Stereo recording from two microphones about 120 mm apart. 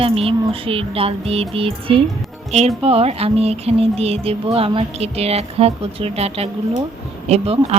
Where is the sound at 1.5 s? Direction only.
50° right (ahead or behind).